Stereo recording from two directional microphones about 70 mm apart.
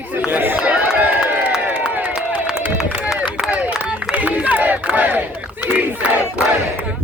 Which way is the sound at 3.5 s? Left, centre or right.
Right.